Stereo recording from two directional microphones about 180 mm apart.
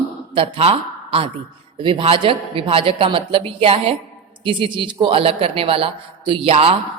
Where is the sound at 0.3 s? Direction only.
30° right (ahead or behind).